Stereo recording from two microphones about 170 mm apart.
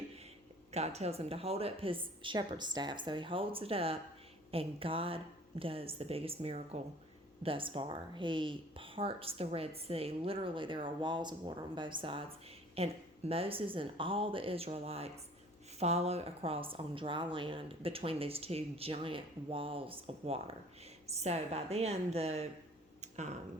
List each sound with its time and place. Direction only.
0.7 s speech: 40° right (ahead or behind)